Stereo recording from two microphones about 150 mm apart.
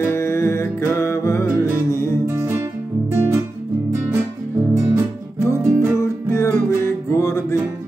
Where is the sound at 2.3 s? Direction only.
20° right (ahead or behind).